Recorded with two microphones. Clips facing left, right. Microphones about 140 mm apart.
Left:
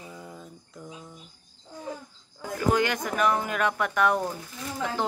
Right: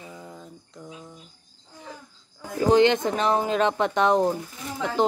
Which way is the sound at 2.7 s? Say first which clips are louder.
Right 8 dB; 25° right (ahead or behind).